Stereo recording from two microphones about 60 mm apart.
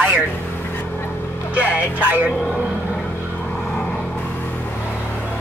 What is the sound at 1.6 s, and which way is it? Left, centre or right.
Speech, right.